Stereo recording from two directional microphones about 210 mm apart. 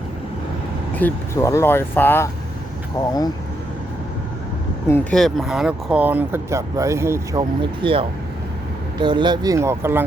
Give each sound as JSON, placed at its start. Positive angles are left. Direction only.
{"t": 0.9, "sound": "speech", "side_deg": 10}
{"t": 4.9, "sound": "speech", "side_deg": 5}